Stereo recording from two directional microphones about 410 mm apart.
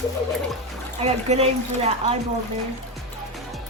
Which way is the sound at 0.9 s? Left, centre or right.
Centre.